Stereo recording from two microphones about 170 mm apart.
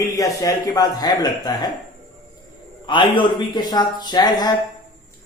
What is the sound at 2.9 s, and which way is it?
Speech, 30° left (ahead or behind).